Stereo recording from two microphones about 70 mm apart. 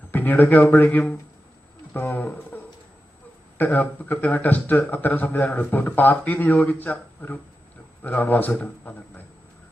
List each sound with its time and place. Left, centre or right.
0.1 s speech: left
3.6 s speech: left